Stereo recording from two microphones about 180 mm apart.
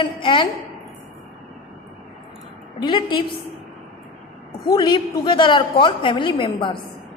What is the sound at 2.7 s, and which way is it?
Speech, 25° left (ahead or behind).